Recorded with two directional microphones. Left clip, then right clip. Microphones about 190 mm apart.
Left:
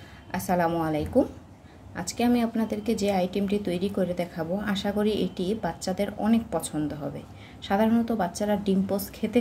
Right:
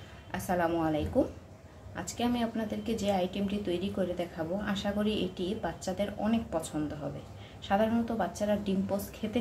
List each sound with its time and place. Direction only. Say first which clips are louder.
0.3 s a woman's voice: left 5 dB; 25° left (ahead or behind)
7.6 s a woman's voice: left 4 dB; 30° left (ahead or behind)